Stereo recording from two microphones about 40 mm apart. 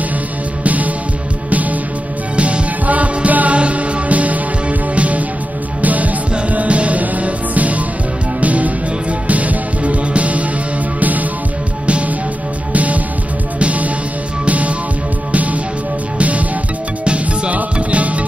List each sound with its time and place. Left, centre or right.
1.5 s music: right
12.7 s music: right